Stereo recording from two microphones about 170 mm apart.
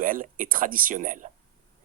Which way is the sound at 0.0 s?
55° right (ahead or behind).